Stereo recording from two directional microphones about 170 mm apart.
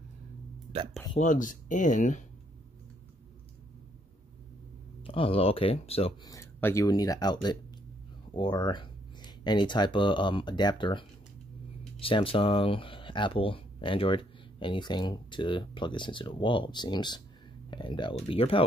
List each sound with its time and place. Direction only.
1.1 s speech: 50° left (ahead or behind)
5.0 s speech: 30° left (ahead or behind)
6.2 s speech: 15° left (ahead or behind)